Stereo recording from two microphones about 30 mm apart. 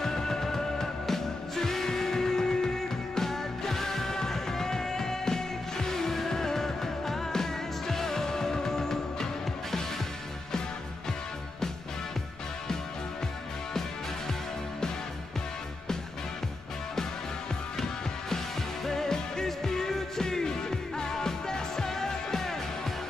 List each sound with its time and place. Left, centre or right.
0.0 s music: centre
3.2 s music: centre
18.9 s music: centre